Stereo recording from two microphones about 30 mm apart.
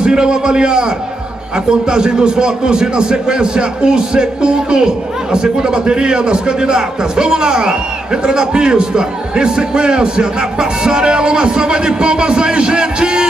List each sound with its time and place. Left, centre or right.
0.0 s a man's voice: right